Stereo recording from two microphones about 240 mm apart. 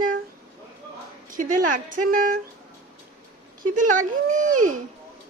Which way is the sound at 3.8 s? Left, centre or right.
Right.